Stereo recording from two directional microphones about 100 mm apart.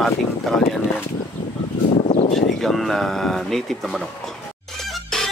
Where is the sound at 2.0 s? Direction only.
90° left.